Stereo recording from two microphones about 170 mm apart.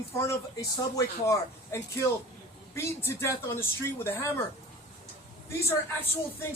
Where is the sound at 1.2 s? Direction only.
15° left (ahead or behind).